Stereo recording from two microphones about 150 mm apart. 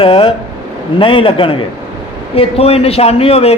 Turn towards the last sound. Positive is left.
turn(degrees=40)  # may be behind; listen again after turning